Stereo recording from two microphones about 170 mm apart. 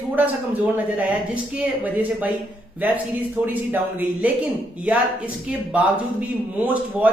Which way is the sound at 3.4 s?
10° right (ahead or behind).